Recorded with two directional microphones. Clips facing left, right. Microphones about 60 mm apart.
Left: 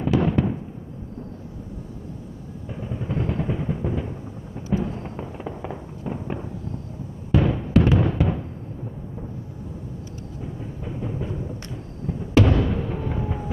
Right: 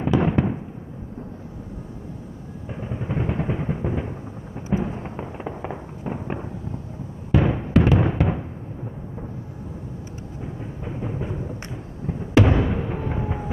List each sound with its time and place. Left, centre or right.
0.0 s fireworks: right
2.7 s a sound: right
4.6 s fireworks: right
7.3 s music: right
7.8 s a sound: right
10.4 s music: right